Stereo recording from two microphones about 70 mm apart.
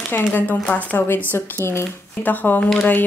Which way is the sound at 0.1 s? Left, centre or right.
Left.